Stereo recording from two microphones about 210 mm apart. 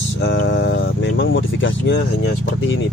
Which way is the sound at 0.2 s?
60° left (ahead or behind).